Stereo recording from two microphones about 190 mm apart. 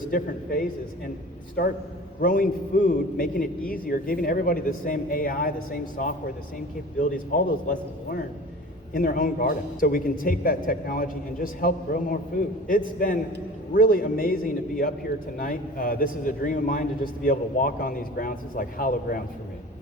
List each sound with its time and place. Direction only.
0.1 s a man's voice: 45° left (ahead or behind)